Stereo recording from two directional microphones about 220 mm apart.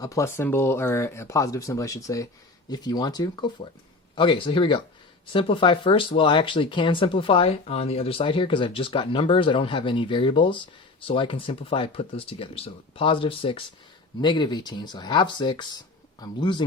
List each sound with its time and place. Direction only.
0.0 s speech: 15° left (ahead or behind)